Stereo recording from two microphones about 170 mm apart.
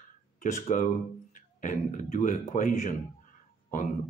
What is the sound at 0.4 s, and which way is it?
Speech, 45° left (ahead or behind).